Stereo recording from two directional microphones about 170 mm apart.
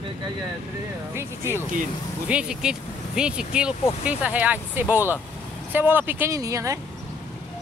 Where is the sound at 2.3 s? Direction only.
5° right (ahead or behind).